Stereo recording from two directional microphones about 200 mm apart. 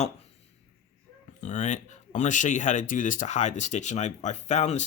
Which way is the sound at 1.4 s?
35° left (ahead or behind).